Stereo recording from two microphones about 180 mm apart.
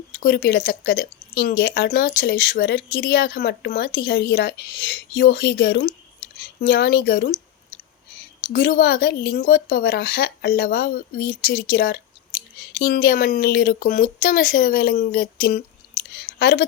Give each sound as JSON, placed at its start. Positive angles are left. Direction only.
{"t": 0.2, "sound": "speech", "side_deg": 55}
{"t": 8.5, "sound": "speech", "side_deg": 60}
{"t": 16.1, "sound": "speech", "side_deg": 65}